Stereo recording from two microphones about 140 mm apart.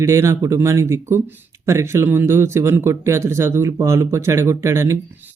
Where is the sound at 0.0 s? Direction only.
20° right (ahead or behind).